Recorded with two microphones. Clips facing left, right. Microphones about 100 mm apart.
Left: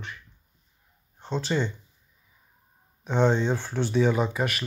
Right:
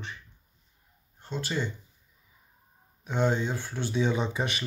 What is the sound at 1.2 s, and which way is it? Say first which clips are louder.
Speech: left 5 dB; 20° left (ahead or behind).